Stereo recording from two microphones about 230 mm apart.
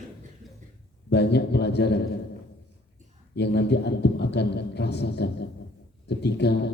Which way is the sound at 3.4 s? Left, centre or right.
Left.